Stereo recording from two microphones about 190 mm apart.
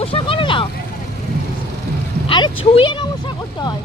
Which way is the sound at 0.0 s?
30° left (ahead or behind).